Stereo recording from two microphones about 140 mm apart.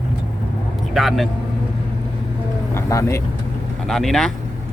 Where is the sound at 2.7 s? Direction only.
20° left (ahead or behind).